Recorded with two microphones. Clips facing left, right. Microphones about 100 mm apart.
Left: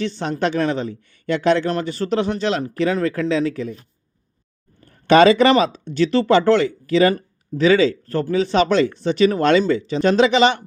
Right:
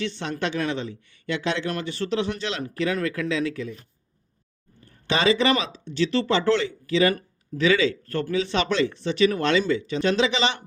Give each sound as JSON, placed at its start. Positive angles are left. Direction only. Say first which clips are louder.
{"t": 0.0, "sound": "speech", "louder": "left 6 dB", "side_deg": 40}
{"t": 4.9, "sound": "speech", "louder": "left 10 dB", "side_deg": 60}
{"t": 7.1, "sound": "speech", "louder": "left 5 dB", "side_deg": 30}